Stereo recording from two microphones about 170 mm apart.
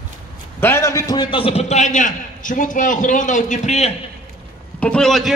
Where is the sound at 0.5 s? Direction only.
15° left (ahead or behind); by 3.9 s 40° left (ahead or behind).